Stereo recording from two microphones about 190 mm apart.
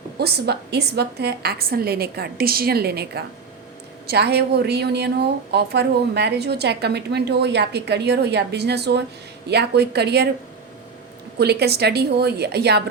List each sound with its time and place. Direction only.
0.2 s a woman's voice: 60° right (ahead or behind)
11.3 s a woman's voice: 60° right (ahead or behind)